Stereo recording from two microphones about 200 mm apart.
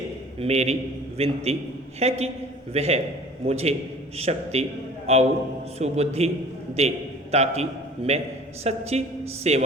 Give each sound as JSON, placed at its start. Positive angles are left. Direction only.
{"t": 0.3, "sound": "a man's voice", "side_deg": -30}